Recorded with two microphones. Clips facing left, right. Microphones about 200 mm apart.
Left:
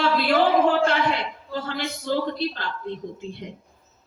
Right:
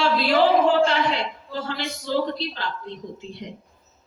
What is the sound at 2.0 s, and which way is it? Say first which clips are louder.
Speech: even; 55° left (ahead or behind).